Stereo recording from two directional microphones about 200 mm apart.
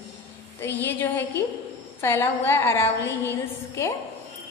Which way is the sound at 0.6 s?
10° left (ahead or behind).